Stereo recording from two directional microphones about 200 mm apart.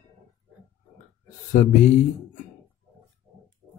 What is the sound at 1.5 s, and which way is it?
Speech, 35° left (ahead or behind).